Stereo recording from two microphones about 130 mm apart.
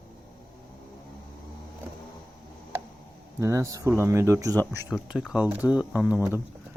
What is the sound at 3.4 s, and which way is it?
Speech, 25° right (ahead or behind).